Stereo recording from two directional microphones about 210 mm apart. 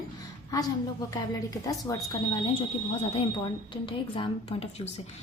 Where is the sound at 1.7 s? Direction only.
15° left (ahead or behind).